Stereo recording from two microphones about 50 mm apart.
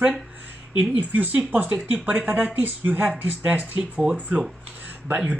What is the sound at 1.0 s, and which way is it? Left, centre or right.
Speech, right.